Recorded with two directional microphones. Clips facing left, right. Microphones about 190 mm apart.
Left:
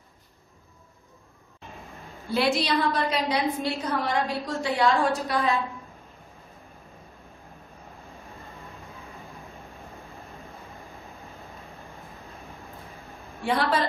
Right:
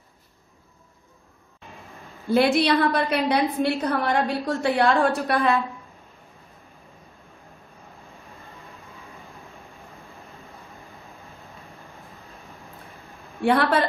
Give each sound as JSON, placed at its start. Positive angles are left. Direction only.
{"t": 2.3, "sound": "a woman's voice", "side_deg": -55}
{"t": 13.4, "sound": "a woman's voice", "side_deg": -60}